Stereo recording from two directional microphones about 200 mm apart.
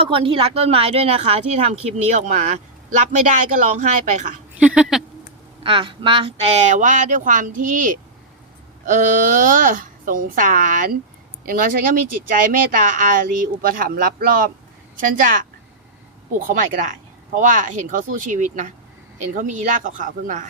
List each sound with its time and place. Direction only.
0.1 s speech: 25° right (ahead or behind)
4.6 s speech: 5° right (ahead or behind)
5.6 s speech: 25° right (ahead or behind); by 7.9 s 40° right (ahead or behind)
8.9 s speech: 40° right (ahead or behind)
16.5 s speech: 40° right (ahead or behind)